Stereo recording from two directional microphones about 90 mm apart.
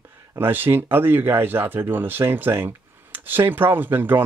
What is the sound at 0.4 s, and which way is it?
Speech, 25° right (ahead or behind).